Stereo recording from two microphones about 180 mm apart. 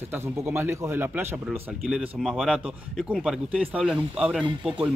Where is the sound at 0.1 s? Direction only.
15° right (ahead or behind).